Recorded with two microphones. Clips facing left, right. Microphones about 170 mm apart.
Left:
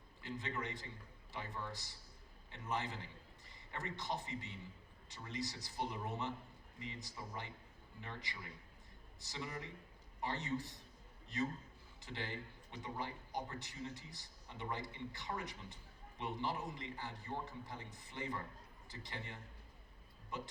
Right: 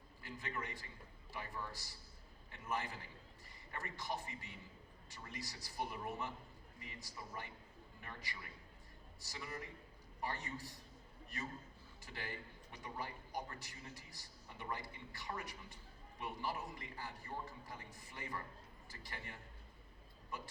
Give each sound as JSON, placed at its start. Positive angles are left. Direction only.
{"t": 0.2, "sound": "a man's voice", "side_deg": 20}